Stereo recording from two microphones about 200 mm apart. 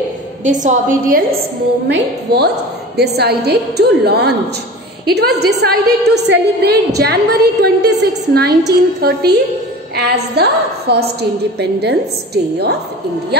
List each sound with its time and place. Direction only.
0.4 s a woman's voice: 40° right (ahead or behind)
1.9 s a woman's voice: 55° right (ahead or behind)
13.3 s a woman's voice: 55° right (ahead or behind)